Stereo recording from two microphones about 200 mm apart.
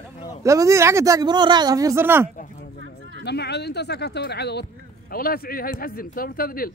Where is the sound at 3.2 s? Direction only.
55° left (ahead or behind).